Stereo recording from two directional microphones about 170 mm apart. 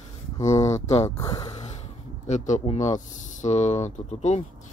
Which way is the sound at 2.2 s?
45° left (ahead or behind).